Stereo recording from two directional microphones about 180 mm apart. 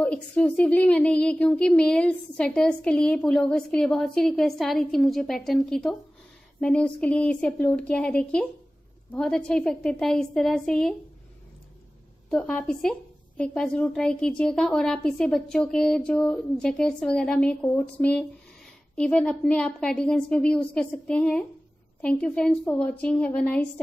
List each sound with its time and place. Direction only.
0.0 s a woman's voice: 5° left (ahead or behind)
12.3 s a woman's voice: 5° left (ahead or behind)